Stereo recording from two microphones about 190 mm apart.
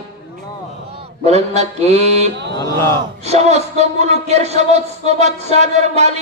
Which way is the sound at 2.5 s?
15° left (ahead or behind).